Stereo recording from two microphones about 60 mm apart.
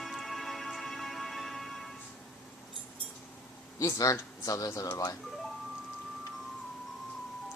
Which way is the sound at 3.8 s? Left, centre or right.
Left.